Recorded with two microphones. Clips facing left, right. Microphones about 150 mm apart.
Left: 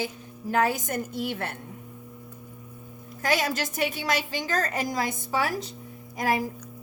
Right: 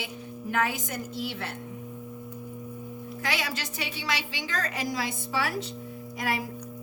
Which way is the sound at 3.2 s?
45° left (ahead or behind).